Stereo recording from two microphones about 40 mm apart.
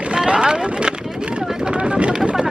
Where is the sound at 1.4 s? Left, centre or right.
Centre.